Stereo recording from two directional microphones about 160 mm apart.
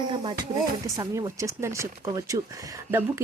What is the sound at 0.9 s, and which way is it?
Speech, 20° right (ahead or behind).